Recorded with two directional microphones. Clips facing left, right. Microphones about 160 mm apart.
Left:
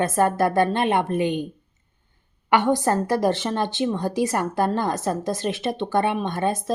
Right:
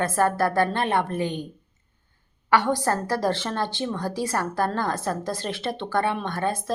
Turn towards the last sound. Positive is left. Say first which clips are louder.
# left 3 dB
turn(degrees=20)  # may be behind; listen again after turning